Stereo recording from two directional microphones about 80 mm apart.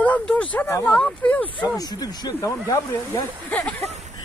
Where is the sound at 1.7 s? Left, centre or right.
Left.